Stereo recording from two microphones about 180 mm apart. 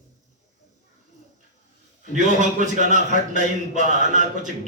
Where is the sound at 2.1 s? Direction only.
45° right (ahead or behind).